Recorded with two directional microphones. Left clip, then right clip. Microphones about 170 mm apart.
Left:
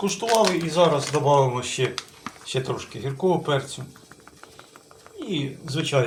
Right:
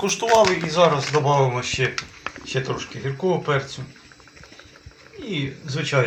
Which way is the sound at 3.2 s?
5° left (ahead or behind).